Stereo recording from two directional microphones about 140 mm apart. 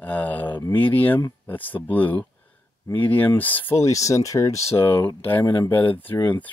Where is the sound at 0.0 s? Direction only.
10° left (ahead or behind).